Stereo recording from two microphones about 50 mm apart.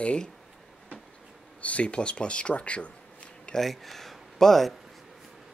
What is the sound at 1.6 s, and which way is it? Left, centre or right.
Speech, left.